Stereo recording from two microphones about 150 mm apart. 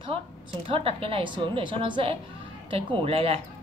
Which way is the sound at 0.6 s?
40° right (ahead or behind).